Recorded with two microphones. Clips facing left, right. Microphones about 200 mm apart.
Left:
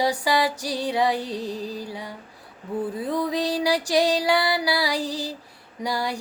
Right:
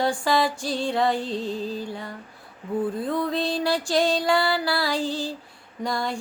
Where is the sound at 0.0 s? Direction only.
10° left (ahead or behind).